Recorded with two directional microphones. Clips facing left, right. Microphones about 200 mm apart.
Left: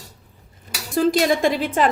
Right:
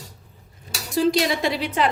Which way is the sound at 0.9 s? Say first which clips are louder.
Left 2 dB; 50° left (ahead or behind).